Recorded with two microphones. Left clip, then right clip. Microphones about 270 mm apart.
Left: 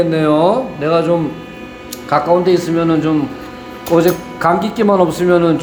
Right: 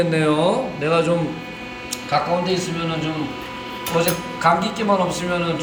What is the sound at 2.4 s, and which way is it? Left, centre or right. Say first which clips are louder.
Speech: left 9 dB; centre.